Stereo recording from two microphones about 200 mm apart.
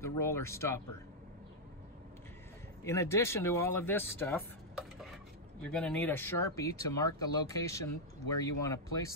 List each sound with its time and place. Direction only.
0.0 s speech: 15° left (ahead or behind)
2.8 s speech: 15° left (ahead or behind)
5.7 s speech: 5° left (ahead or behind)